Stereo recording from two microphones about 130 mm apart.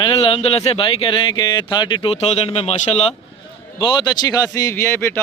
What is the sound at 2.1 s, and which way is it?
Speech, 50° left (ahead or behind).